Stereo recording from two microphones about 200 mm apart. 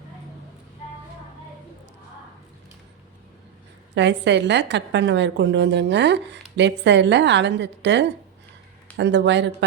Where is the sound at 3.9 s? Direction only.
60° right (ahead or behind).